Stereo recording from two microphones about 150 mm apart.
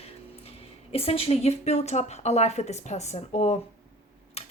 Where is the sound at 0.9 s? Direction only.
40° left (ahead or behind).